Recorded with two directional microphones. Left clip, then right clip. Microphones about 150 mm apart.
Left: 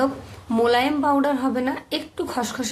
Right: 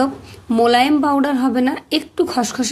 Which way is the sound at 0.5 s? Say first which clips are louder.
Right 6 dB; 35° right (ahead or behind).